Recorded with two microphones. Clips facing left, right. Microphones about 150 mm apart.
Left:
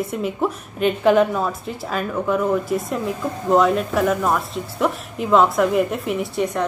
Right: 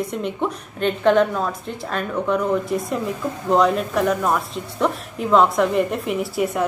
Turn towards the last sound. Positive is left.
turn(degrees=-5)  # may be behind; listen again after turning